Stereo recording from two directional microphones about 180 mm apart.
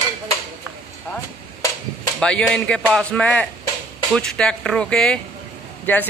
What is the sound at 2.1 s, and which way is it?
Speech, 5° left (ahead or behind).